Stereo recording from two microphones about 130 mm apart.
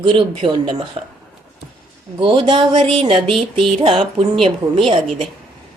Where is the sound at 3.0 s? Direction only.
45° right (ahead or behind).